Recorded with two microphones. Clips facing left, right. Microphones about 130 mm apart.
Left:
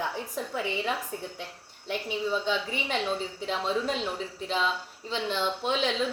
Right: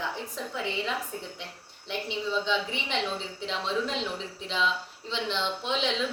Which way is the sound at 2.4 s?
45° left (ahead or behind).